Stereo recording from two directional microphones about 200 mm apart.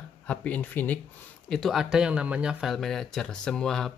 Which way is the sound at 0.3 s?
5° left (ahead or behind).